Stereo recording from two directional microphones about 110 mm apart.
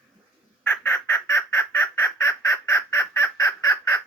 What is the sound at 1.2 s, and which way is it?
Fowl, 25° left (ahead or behind).